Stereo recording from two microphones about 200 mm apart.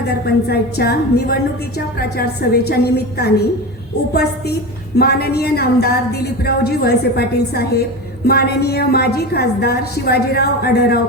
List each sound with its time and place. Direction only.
0.1 s speech: 55° left (ahead or behind)